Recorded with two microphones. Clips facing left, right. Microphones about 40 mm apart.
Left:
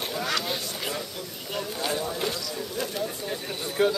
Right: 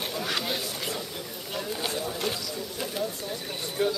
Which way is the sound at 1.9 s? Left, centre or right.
Centre.